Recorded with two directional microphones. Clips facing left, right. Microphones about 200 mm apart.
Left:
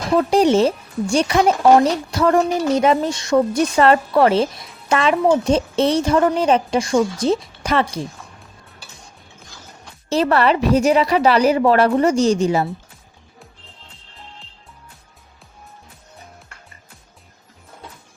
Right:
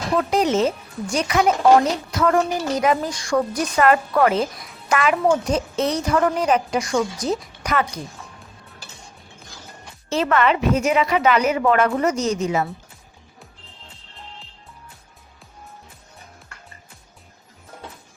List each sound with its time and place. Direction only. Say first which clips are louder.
0.2 s a woman's voice: left 5 dB; 30° left (ahead or behind)
10.1 s a woman's voice: left 3 dB; 35° left (ahead or behind)